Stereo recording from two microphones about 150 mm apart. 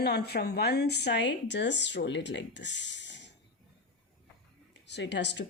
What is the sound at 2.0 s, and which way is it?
Speech, 80° left.